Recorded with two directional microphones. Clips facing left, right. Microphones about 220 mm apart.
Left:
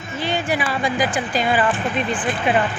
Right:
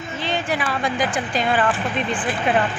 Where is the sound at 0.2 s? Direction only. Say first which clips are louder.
Left 2 dB; 5° left (ahead or behind).